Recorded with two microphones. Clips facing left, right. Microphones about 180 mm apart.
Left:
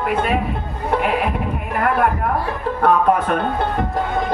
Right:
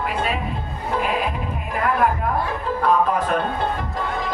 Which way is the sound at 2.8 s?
65° left (ahead or behind).